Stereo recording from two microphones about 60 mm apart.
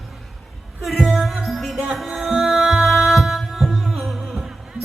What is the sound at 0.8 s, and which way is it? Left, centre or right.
Music, centre.